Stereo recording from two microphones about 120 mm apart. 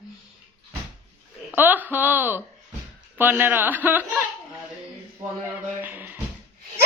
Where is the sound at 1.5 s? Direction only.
15° right (ahead or behind).